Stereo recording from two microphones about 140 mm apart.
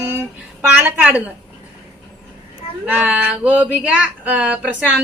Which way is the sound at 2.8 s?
10° right (ahead or behind).